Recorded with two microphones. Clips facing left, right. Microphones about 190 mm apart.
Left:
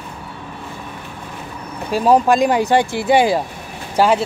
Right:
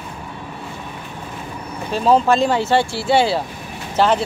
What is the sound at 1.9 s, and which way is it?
Speech, 10° left (ahead or behind).